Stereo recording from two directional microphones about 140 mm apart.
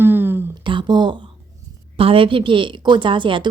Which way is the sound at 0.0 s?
15° right (ahead or behind).